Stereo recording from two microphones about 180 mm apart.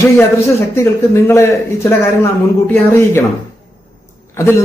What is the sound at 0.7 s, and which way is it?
A man's voice, 15° left (ahead or behind).